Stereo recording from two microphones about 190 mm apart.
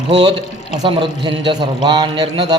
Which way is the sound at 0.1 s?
25° right (ahead or behind).